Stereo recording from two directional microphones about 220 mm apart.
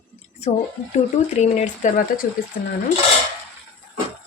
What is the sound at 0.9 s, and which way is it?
Speech, 30° left (ahead or behind).